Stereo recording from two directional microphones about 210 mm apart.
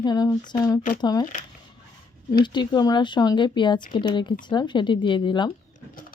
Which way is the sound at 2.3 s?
20° left (ahead or behind).